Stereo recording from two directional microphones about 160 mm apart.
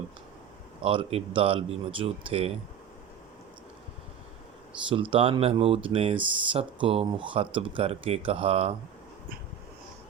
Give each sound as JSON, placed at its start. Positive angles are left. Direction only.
{"t": 0.8, "sound": "speech", "side_deg": -35}
{"t": 4.9, "sound": "speech", "side_deg": -35}